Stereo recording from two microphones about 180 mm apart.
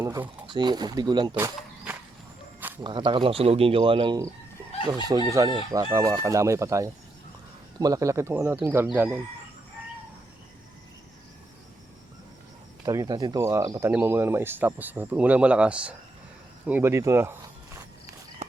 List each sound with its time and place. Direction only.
0.0 s speech: 20° right (ahead or behind)
2.8 s speech: 25° right (ahead or behind); by 9.2 s 10° right (ahead or behind)
12.8 s speech: 20° right (ahead or behind)